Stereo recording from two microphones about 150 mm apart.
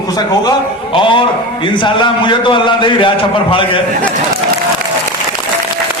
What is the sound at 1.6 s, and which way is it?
A man's voice, 35° left (ahead or behind).